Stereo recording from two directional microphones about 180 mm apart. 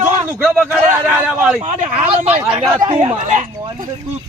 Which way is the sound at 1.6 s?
35° right (ahead or behind).